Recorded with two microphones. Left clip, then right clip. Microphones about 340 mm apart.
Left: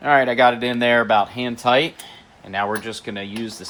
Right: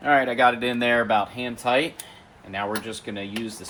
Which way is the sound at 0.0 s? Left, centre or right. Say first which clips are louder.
Left 4 dB; left.